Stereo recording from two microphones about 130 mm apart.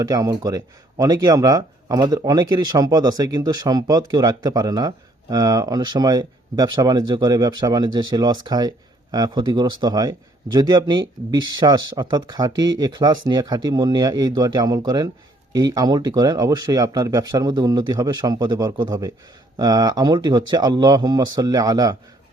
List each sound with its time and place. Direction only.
0.0 s speech: 30° right (ahead or behind)